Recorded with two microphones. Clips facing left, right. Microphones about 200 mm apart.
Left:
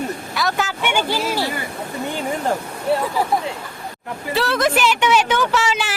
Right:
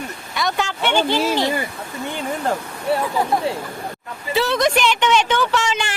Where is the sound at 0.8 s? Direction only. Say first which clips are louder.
Right 2 dB; 10° left (ahead or behind).